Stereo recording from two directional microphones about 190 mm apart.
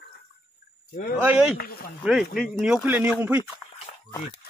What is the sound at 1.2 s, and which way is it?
Speech, 10° right (ahead or behind).